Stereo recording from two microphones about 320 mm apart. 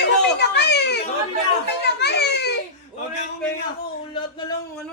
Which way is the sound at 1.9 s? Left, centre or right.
Left.